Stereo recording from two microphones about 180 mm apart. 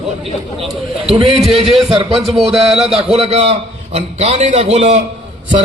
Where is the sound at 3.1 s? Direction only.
35° right (ahead or behind).